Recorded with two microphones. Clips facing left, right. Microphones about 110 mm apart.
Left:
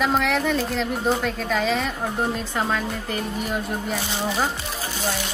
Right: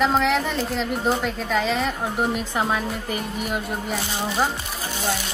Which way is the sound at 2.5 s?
15° right (ahead or behind).